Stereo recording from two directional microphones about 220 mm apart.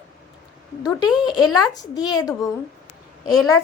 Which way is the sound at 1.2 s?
20° left (ahead or behind).